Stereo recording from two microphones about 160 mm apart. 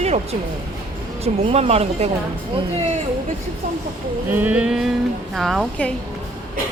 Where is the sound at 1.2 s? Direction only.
40° right (ahead or behind).